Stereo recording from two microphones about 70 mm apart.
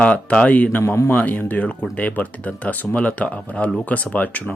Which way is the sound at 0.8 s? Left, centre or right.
Left.